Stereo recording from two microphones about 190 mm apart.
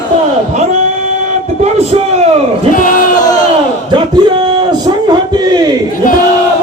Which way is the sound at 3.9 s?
25° right (ahead or behind).